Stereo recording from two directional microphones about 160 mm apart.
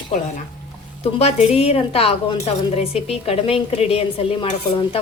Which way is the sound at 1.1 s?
40° left (ahead or behind).